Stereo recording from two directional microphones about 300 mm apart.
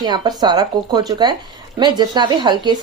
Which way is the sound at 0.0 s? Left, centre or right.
Centre.